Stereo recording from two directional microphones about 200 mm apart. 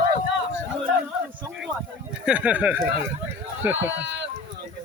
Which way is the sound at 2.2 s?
5° right (ahead or behind).